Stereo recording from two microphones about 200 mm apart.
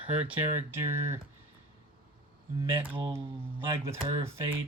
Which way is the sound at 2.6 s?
25° right (ahead or behind).